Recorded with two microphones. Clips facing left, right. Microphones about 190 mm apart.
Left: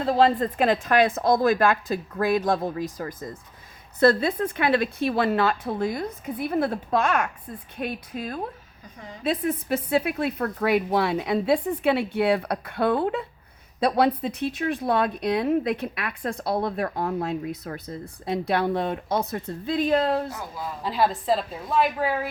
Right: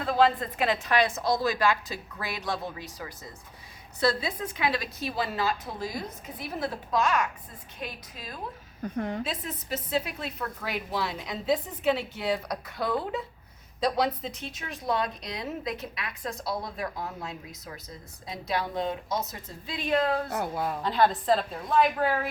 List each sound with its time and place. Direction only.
0.0 s a woman's voice: 35° left (ahead or behind); by 8.4 s 55° left (ahead or behind)
8.8 s a woman's voice: 60° right (ahead or behind)
9.2 s speech: 55° left (ahead or behind); by 20.2 s 30° left (ahead or behind)
20.3 s a woman's voice: 60° right (ahead or behind)
20.8 s a woman's voice: 5° left (ahead or behind)